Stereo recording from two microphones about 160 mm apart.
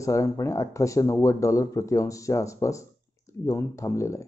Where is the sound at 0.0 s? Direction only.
20° left (ahead or behind).